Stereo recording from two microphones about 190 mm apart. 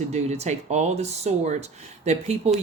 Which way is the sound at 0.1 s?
35° right (ahead or behind).